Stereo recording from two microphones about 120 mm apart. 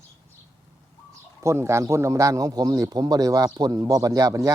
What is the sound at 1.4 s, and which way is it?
A man's voice, 25° right (ahead or behind).